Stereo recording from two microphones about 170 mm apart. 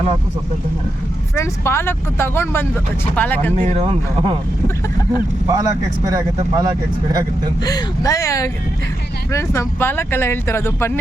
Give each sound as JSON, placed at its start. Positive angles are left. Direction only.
{"t": 1.4, "sound": "speech", "side_deg": 15}
{"t": 3.5, "sound": "speech", "side_deg": -40}
{"t": 5.5, "sound": "speech", "side_deg": -20}
{"t": 7.6, "sound": "speech", "side_deg": 20}